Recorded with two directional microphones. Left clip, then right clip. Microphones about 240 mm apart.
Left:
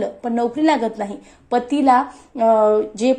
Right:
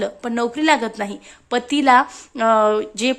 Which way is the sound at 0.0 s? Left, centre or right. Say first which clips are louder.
Left 1 dB; right.